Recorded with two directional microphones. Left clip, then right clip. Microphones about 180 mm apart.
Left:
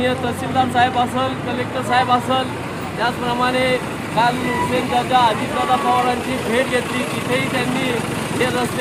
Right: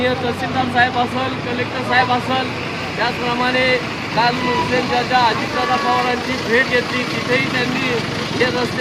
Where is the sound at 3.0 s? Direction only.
15° left (ahead or behind).